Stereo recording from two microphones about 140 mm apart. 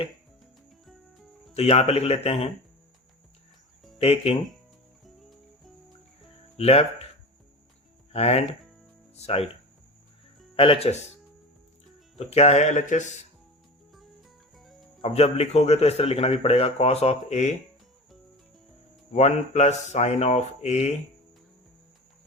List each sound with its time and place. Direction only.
1.5 s a man's voice: 50° left (ahead or behind)
3.9 s speech: 45° left (ahead or behind)
5.0 s cricket: centre (ahead or behind)
6.6 s a man's voice: 45° left (ahead or behind)
8.1 s a man's voice: 50° left (ahead or behind)
10.5 s a man's voice: 40° left (ahead or behind)
12.2 s speech: 50° left (ahead or behind)
14.5 s cricket: centre (ahead or behind)
15.0 s a man's voice: 50° left (ahead or behind)
19.1 s a man's voice: 50° left (ahead or behind)